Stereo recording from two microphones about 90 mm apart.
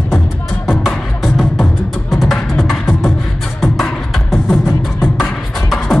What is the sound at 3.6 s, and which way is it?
Beatboxing, centre (ahead or behind).